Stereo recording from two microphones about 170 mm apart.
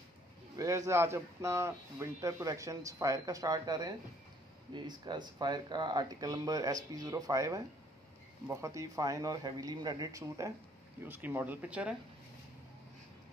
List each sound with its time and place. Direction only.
0.6 s a man's voice: 20° right (ahead or behind)